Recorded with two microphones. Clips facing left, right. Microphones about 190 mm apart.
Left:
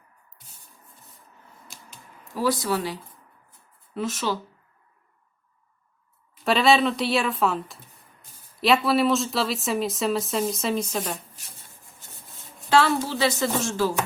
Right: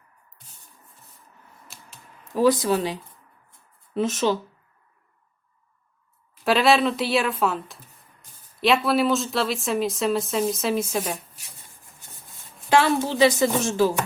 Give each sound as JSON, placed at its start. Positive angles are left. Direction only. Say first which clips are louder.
{"t": 2.3, "sound": "speech", "louder": "right 5 dB", "side_deg": -20}
{"t": 6.4, "sound": "speech", "louder": "right 1 dB", "side_deg": 0}
{"t": 12.7, "sound": "a woman's voice", "louder": "right 1 dB", "side_deg": -20}